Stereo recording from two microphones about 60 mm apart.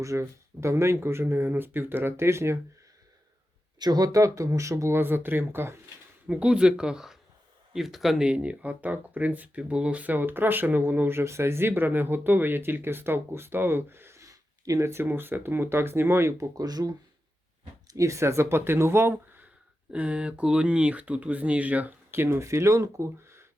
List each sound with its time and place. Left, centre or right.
0.0 s speech: right
0.9 s speech: right
3.9 s speech: right
4.9 s speech: right
6.2 s speech: centre
8.2 s speech: centre; by 14.2 s right
14.2 s a sound: right
14.8 s speech: right
16.6 s speech: right
17.8 s speech: right
19.9 s speech: centre
22.1 s speech: right